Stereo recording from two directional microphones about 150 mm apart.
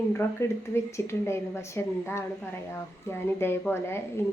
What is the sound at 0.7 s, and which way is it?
A woman's voice, 20° left (ahead or behind).